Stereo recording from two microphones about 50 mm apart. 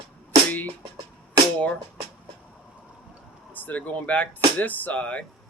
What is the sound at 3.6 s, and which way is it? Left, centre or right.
Speech, left.